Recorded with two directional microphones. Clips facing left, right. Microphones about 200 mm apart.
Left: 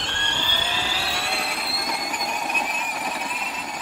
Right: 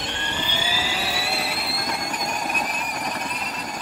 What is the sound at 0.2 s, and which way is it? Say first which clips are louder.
Vehicle: right 1 dB; 5° right (ahead or behind).